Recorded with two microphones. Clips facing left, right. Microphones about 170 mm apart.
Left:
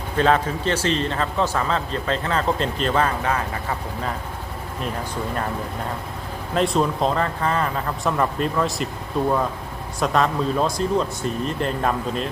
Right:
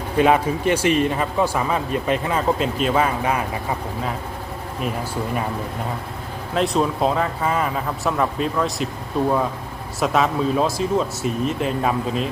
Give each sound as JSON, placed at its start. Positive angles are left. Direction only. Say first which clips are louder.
{"t": 0.2, "sound": "speech", "louder": "right 2 dB", "side_deg": -10}
{"t": 6.5, "sound": "speech", "louder": "even", "side_deg": 0}